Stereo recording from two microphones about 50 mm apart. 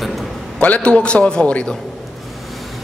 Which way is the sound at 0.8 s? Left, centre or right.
Left.